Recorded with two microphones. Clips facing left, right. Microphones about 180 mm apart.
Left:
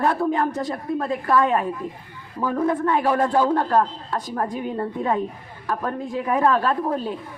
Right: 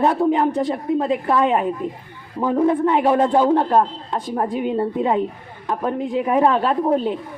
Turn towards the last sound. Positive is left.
turn(degrees=-20)  # may be behind; listen again after turning